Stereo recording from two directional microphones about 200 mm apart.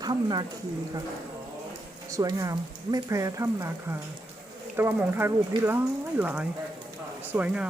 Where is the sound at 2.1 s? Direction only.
15° right (ahead or behind).